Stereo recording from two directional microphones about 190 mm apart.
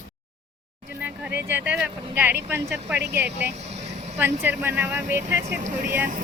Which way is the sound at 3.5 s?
35° right (ahead or behind).